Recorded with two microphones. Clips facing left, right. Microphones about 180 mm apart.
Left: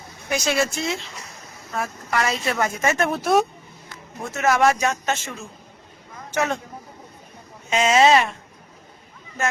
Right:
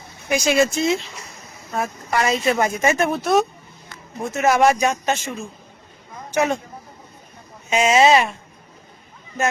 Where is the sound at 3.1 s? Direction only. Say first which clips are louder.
Right 1 dB; 10° left (ahead or behind).